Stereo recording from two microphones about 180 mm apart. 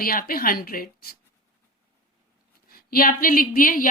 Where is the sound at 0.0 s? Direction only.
55° left (ahead or behind).